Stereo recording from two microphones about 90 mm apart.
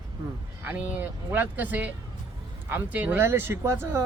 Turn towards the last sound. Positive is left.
turn(degrees=-30)  # may be behind; listen again after turning